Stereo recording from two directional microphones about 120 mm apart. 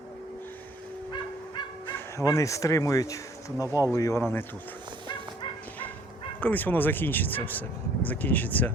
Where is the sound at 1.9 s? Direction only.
25° left (ahead or behind).